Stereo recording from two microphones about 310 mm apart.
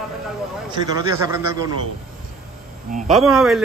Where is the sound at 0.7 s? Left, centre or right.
Centre.